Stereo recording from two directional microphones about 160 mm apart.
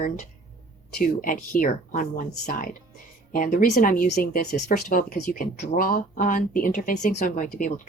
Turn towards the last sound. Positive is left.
turn(degrees=55)  # may be behind; listen again after turning